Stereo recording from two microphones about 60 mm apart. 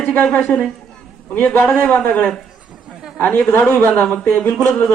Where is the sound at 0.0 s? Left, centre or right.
Left.